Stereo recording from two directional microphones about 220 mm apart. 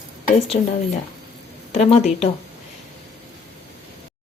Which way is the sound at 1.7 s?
30° left (ahead or behind).